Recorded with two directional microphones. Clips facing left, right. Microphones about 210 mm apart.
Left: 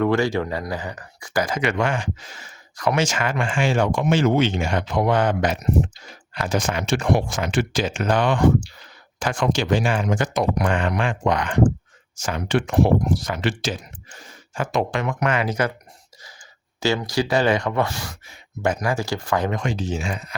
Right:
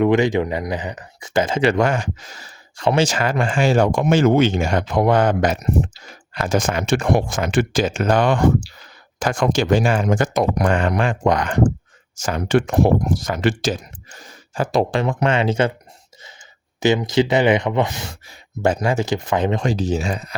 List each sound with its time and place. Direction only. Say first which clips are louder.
0.0 s speech: right 4 dB; 20° right (ahead or behind)
1.7 s speech: right 4 dB; 40° right (ahead or behind)
16.8 s speech: right 5 dB; 20° right (ahead or behind); by 20.3 s 35° right (ahead or behind)